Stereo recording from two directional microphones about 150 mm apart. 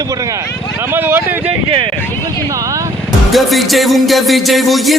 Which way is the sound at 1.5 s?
35° right (ahead or behind).